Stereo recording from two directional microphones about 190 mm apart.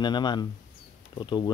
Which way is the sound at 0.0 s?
25° left (ahead or behind).